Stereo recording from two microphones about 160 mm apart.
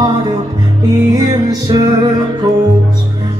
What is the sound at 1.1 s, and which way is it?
Music, 25° right (ahead or behind).